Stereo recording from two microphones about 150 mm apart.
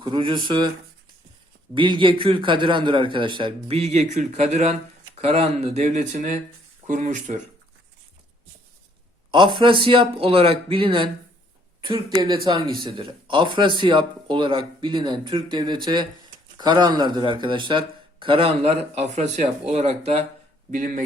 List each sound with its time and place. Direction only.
0.0 s a man's voice: 30° right (ahead or behind)
1.7 s a man's voice: 35° right (ahead or behind); by 7.3 s 55° right (ahead or behind)
9.3 s a man's voice: 35° right (ahead or behind)
12.1 s a man's voice: 30° right (ahead or behind); by 20.2 s 45° right (ahead or behind)
20.7 s speech: 60° right (ahead or behind)